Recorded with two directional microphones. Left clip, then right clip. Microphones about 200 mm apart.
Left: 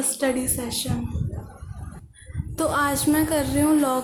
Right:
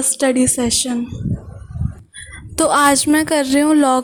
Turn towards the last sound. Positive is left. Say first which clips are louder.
# right 7 dB
turn(degrees=-45)  # may be behind; listen again after turning